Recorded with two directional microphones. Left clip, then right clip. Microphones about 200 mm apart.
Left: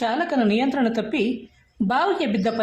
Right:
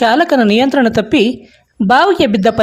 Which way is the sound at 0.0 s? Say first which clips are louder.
Right 12 dB; 45° right (ahead or behind).